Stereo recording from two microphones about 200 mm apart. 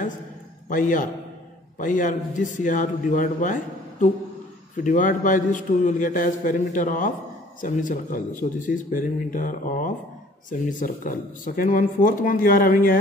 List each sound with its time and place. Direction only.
0.7 s a man's voice: 40° left (ahead or behind)